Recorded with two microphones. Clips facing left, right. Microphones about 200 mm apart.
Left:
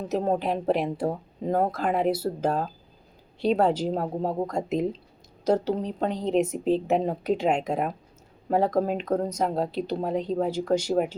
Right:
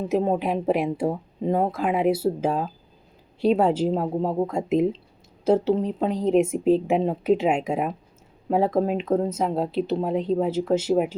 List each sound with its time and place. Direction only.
0.0 s speech: 5° right (ahead or behind)